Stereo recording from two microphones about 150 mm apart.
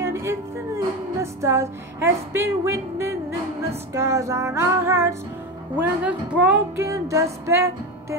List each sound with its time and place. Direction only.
0.0 s music: 20° right (ahead or behind)